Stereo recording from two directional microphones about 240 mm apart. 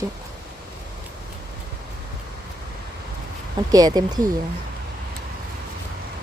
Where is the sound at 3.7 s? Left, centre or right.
Centre.